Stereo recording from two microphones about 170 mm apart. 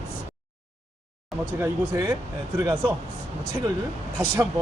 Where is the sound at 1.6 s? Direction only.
20° right (ahead or behind).